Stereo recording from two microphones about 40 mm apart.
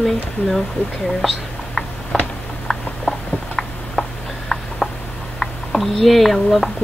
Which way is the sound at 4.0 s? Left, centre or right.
Centre.